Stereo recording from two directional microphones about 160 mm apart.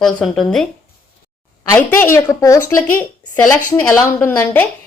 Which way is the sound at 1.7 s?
15° left (ahead or behind).